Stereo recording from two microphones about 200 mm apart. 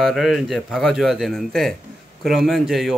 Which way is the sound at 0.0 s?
Centre (ahead or behind).